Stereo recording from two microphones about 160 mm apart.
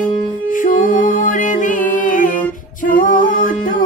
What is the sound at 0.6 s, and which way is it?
Music, 55° left (ahead or behind).